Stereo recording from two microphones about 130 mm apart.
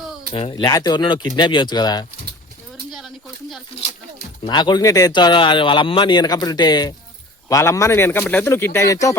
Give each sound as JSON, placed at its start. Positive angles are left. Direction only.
{"t": 0.3, "sound": "speech", "side_deg": 40}
{"t": 4.4, "sound": "a man's voice", "side_deg": 35}